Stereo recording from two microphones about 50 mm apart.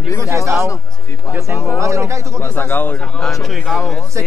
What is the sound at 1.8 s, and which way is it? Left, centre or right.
Speech, right.